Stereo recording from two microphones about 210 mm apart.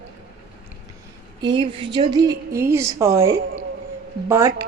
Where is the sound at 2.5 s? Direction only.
15° right (ahead or behind).